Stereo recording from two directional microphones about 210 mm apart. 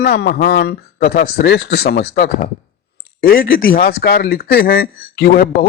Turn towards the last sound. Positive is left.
turn(degrees=45)  # may be behind; listen again after turning